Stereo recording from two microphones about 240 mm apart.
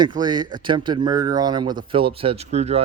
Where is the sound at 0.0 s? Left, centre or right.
Centre.